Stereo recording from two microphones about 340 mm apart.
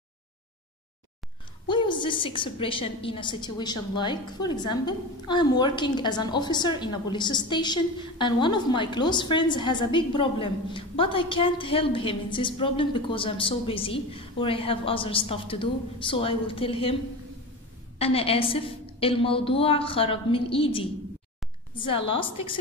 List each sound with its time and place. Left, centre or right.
1.7 s a woman's voice: centre
17.9 s a woman's voice: centre
21.7 s a woman's voice: centre